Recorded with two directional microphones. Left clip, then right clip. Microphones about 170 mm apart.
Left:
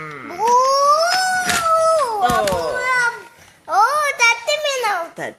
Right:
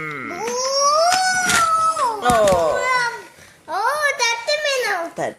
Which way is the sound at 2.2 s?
Centre (ahead or behind).